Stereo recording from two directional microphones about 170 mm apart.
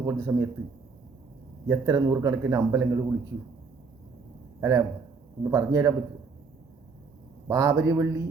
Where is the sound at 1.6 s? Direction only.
20° right (ahead or behind).